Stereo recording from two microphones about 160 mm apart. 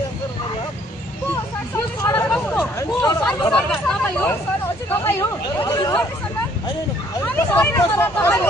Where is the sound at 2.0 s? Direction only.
15° left (ahead or behind).